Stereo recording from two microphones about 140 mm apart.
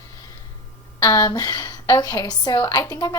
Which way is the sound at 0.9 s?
25° left (ahead or behind).